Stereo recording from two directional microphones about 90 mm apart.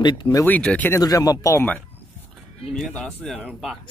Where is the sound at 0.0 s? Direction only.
50° left (ahead or behind).